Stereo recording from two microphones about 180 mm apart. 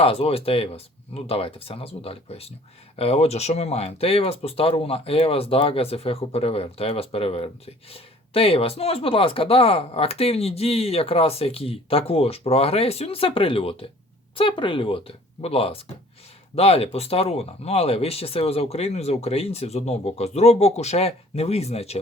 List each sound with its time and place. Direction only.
0.0 s speech: 35° left (ahead or behind)